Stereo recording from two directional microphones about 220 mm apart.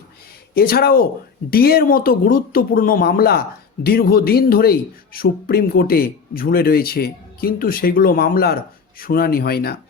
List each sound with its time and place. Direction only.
0.5 s speech: 45° left (ahead or behind)